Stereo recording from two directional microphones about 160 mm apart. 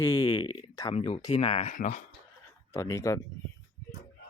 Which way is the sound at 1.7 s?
50° left (ahead or behind).